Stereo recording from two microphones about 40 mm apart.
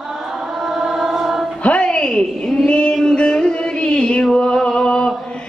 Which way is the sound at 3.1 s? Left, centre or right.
Left.